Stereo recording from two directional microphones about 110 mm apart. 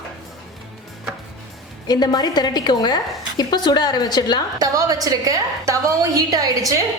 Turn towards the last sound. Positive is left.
turn(degrees=-30)  # may be behind; listen again after turning